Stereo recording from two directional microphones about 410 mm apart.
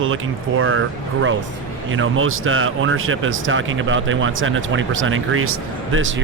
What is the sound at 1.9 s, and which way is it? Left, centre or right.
Speech, right.